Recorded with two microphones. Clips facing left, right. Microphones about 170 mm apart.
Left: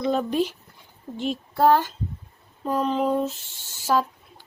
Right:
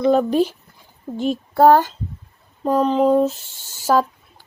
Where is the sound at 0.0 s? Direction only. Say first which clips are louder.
Right 7 dB; 45° right (ahead or behind).